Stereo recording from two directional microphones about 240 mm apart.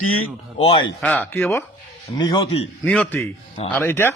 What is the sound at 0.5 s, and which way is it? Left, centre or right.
Speech, left.